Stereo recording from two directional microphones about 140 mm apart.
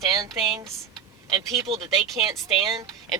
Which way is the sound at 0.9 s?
30° right (ahead or behind).